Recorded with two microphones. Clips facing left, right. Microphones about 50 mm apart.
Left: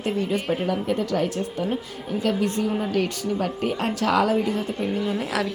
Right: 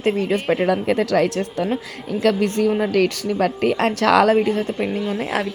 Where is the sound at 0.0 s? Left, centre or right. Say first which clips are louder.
Right 5 dB; right.